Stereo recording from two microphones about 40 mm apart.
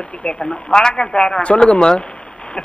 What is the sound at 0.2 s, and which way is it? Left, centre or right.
Speech, left.